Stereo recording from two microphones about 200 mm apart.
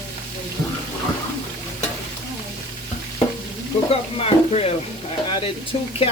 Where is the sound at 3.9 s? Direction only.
30° left (ahead or behind).